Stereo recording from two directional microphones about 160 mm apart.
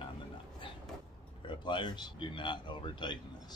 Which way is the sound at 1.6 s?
30° left (ahead or behind).